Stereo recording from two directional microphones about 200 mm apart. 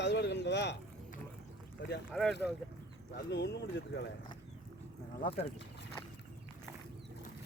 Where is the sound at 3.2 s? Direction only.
60° left (ahead or behind).